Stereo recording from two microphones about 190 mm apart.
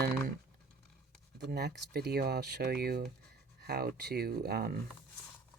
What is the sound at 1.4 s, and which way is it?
Speech, 60° right (ahead or behind).